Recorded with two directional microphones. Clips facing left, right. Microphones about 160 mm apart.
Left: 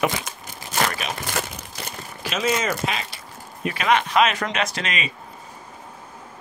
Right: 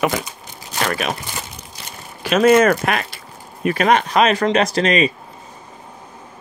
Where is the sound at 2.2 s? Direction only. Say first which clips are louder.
Right 11 dB; 60° right (ahead or behind).